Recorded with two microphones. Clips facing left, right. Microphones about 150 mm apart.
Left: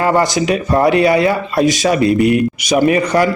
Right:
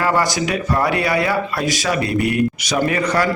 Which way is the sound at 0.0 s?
25° left (ahead or behind).